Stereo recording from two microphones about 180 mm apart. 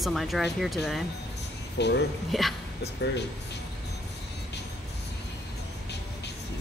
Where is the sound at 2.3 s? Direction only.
Centre (ahead or behind).